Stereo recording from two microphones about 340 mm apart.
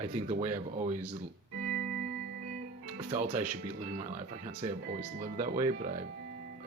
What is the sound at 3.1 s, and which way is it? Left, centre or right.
Speech, centre.